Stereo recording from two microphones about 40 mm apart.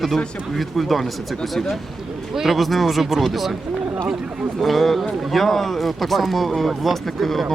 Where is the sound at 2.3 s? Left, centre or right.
Centre.